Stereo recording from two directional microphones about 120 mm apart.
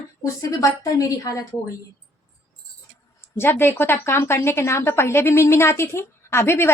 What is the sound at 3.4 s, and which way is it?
A woman's voice, 20° left (ahead or behind).